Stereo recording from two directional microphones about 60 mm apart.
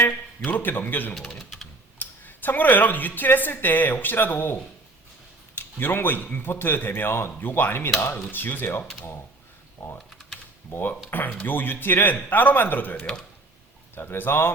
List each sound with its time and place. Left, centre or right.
0.4 s a woman's voice: left
10.7 s a woman's voice: left